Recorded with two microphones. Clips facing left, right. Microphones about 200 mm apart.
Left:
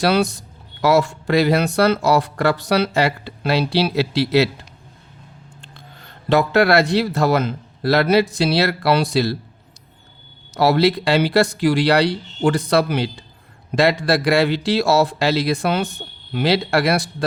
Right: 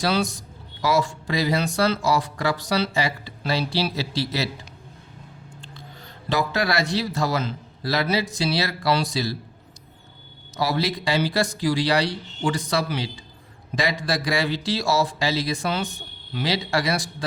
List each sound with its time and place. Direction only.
0.0 s speech: 65° left (ahead or behind)
5.6 s speech: 55° left (ahead or behind)
10.5 s speech: 70° left (ahead or behind)